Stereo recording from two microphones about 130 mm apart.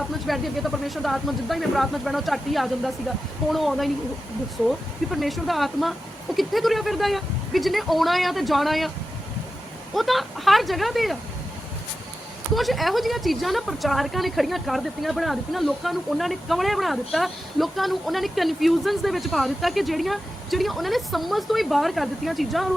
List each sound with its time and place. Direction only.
0.3 s speech: centre (ahead or behind)
5.1 s speech: centre (ahead or behind)
9.9 s speech: centre (ahead or behind)
12.5 s speech: centre (ahead or behind)